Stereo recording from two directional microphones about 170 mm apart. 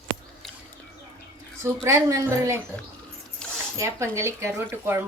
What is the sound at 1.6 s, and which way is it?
Speech, 15° right (ahead or behind).